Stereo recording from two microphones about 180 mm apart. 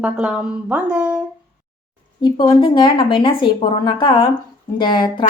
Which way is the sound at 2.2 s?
25° left (ahead or behind).